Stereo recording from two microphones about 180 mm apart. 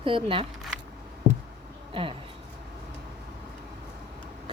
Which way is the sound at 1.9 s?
30° right (ahead or behind).